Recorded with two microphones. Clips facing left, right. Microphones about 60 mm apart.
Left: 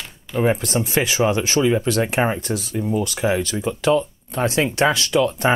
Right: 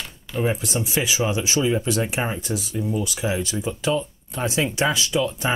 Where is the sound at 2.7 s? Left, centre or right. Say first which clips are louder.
Left 4 dB; left.